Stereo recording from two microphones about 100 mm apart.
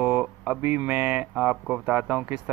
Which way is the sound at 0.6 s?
20° right (ahead or behind).